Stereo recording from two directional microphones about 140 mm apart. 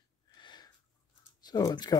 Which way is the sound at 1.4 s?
30° left (ahead or behind).